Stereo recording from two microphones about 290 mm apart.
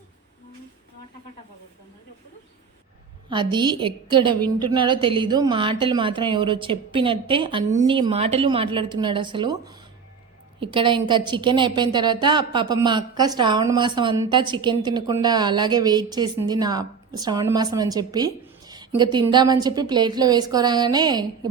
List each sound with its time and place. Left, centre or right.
3.2 s a woman's voice: centre